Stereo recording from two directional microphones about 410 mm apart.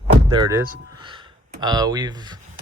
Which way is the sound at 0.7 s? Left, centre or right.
Centre.